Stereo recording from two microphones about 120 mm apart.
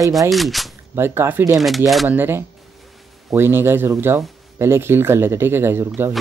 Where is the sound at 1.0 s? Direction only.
20° right (ahead or behind).